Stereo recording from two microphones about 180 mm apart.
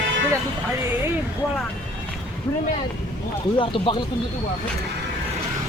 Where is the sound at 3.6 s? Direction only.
30° left (ahead or behind).